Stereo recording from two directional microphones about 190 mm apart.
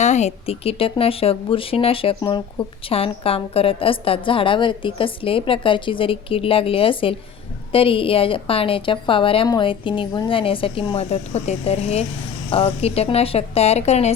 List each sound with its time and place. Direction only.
0.0 s speech: 35° left (ahead or behind)